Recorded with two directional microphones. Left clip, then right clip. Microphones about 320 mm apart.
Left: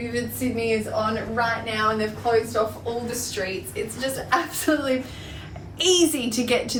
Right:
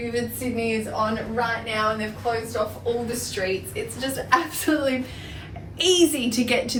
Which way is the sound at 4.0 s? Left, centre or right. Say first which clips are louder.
Right 2 dB; centre.